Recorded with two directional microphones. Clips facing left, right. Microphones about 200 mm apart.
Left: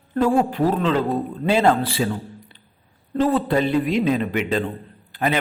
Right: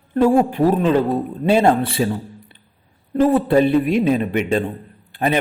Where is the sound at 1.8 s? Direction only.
55° right (ahead or behind).